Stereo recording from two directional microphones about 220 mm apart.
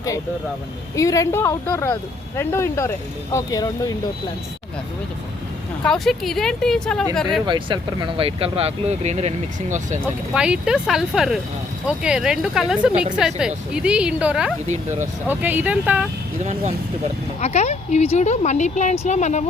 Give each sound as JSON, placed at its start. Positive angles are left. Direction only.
{"t": 0.9, "sound": "speech", "side_deg": 15}
{"t": 5.8, "sound": "speech", "side_deg": 0}
{"t": 7.4, "sound": "speech", "side_deg": -20}
{"t": 10.0, "sound": "speech", "side_deg": -5}
{"t": 16.4, "sound": "speech", "side_deg": -30}
{"t": 17.4, "sound": "speech", "side_deg": 30}